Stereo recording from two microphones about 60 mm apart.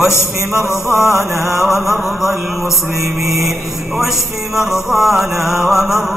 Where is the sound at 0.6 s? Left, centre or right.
Left.